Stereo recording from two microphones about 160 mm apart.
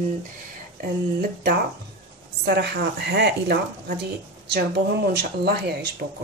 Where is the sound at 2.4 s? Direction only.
90° right.